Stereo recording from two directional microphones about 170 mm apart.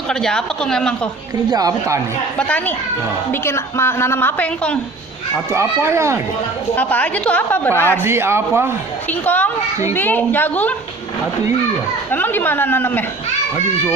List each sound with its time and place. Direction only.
0.1 s speech: 5° left (ahead or behind)
1.5 s a woman's voice: 20° right (ahead or behind)
3.4 s a woman's voice: 15° left (ahead or behind)
5.5 s a child's voice: 15° right (ahead or behind)
6.7 s a woman's voice: 10° left (ahead or behind)
8.0 s a child's voice: 15° right (ahead or behind)
9.0 s a woman's voice: 10° left (ahead or behind)
12.1 s a woman's voice: 10° left (ahead or behind)